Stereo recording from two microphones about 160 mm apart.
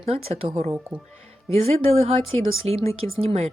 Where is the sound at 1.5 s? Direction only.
40° right (ahead or behind).